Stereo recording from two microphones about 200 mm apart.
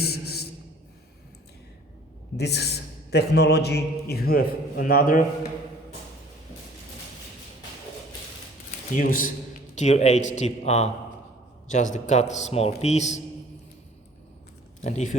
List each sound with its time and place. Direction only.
0.0 s music: 50° left (ahead or behind)
2.4 s a man's voice: 55° left (ahead or behind)
8.9 s a man's voice: 45° left (ahead or behind)
14.8 s speech: 35° left (ahead or behind)